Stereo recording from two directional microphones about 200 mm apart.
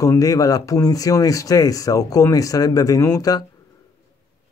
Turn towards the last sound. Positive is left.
turn(degrees=15)  # may be behind; listen again after turning